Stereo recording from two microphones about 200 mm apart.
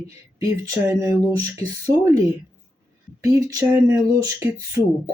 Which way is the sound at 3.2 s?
15° right (ahead or behind).